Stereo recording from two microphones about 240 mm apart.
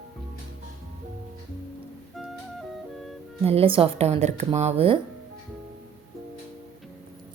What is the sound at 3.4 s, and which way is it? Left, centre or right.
A woman's voice, right.